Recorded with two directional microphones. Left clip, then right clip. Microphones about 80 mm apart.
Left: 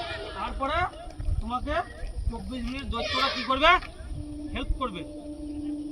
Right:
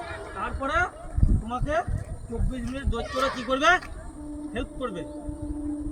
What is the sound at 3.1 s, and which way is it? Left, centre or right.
Speech, centre.